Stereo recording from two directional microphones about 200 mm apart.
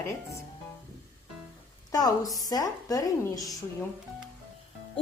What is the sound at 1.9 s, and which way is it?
A woman's voice, 20° left (ahead or behind).